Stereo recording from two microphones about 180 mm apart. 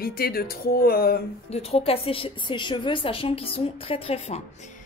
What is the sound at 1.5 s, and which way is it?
A woman's voice, 35° left (ahead or behind).